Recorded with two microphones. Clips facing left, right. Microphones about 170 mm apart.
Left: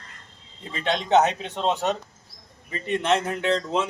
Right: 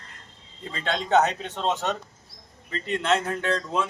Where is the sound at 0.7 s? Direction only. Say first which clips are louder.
Left 2 dB; 20° left (ahead or behind).